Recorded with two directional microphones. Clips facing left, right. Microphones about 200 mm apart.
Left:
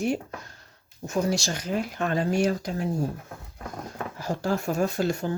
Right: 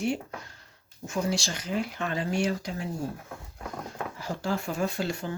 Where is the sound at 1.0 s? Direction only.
40° left (ahead or behind).